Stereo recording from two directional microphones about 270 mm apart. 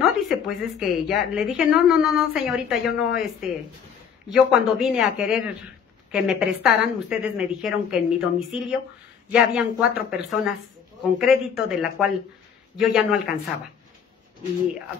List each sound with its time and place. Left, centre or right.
0.0 s a woman's voice: centre